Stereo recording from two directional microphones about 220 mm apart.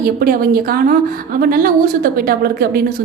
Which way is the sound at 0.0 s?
40° right (ahead or behind).